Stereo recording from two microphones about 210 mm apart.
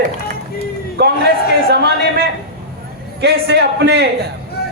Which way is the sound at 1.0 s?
50° right (ahead or behind).